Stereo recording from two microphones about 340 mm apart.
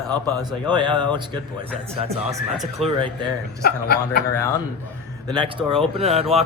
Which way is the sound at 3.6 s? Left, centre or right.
Left.